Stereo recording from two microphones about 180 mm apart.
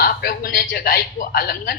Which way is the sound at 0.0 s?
55° left (ahead or behind).